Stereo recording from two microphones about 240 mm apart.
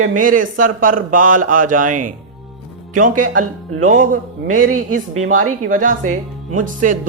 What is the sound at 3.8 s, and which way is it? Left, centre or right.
A man's voice, right.